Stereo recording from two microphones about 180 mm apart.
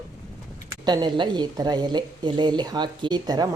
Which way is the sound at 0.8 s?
25° right (ahead or behind).